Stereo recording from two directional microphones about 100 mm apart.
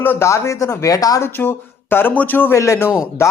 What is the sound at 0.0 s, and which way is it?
Speech, 25° left (ahead or behind).